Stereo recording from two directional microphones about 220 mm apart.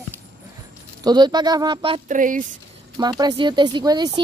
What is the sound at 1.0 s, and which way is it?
Speech, 20° right (ahead or behind).